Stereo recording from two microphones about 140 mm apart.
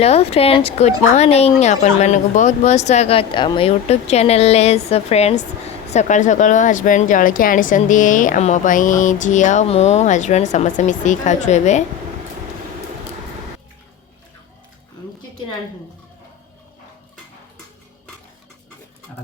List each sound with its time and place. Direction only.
0.0 s a woman's voice: 45° left (ahead or behind)
3.7 s speech: 50° left (ahead or behind)
9.6 s speech: 50° left (ahead or behind)